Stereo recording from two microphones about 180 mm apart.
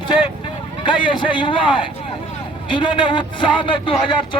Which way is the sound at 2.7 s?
25° left (ahead or behind).